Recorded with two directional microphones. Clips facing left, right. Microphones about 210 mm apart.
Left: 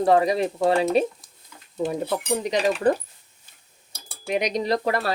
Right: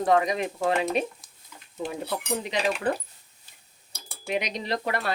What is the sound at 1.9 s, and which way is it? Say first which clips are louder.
Speech: left 4 dB; 40° left (ahead or behind).